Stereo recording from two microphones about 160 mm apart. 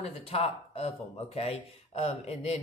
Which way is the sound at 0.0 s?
40° left (ahead or behind).